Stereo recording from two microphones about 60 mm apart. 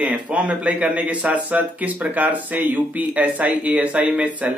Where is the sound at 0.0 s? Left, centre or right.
Right.